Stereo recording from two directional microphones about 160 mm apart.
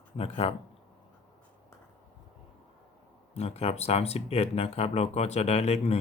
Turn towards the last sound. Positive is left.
turn(degrees=40)  # may be behind; listen again after turning